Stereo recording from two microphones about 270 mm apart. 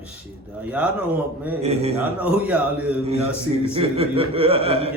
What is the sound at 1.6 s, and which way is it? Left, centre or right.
Speech, right.